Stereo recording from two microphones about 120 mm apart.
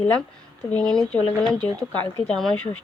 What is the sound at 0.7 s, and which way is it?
Speech, 10° left (ahead or behind).